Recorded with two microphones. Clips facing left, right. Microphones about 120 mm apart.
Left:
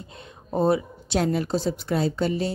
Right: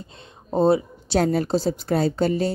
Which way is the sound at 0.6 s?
30° right (ahead or behind).